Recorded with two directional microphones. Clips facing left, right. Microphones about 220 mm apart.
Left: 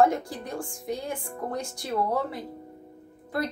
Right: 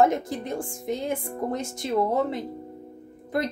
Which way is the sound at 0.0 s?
20° right (ahead or behind).